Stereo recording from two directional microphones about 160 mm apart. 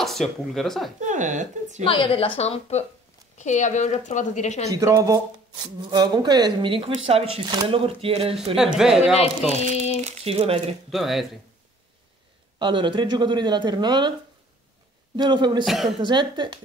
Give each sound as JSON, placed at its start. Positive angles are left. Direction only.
{"t": 0.0, "sound": "speech", "side_deg": 0}
{"t": 1.0, "sound": "speech", "side_deg": -50}
{"t": 1.9, "sound": "a woman's voice", "side_deg": 30}
{"t": 4.7, "sound": "speech", "side_deg": -20}
{"t": 8.5, "sound": "speech", "side_deg": -5}
{"t": 10.0, "sound": "speech", "side_deg": -40}
{"t": 10.9, "sound": "speech", "side_deg": 0}
{"t": 12.5, "sound": "speech", "side_deg": -30}
{"t": 15.1, "sound": "speech", "side_deg": -30}
{"t": 15.6, "sound": "speech", "side_deg": 0}
{"t": 16.0, "sound": "speech", "side_deg": -30}